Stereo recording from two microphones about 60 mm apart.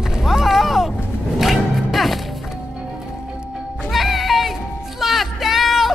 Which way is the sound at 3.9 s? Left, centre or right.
Centre.